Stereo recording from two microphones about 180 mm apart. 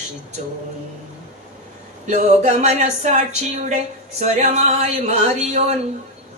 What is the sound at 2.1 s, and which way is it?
Speech, 40° right (ahead or behind).